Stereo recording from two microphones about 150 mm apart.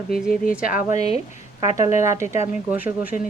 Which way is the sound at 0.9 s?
40° left (ahead or behind).